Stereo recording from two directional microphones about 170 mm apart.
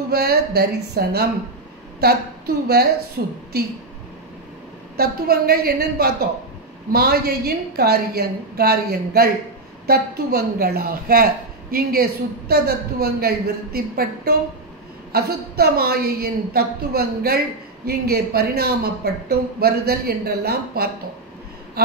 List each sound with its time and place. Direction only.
0.1 s a woman's voice: 65° right (ahead or behind)
4.9 s a woman's voice: 65° right (ahead or behind)
21.8 s a sound: 65° right (ahead or behind)